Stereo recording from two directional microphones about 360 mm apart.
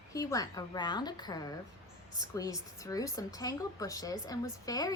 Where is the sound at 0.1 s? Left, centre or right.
Centre.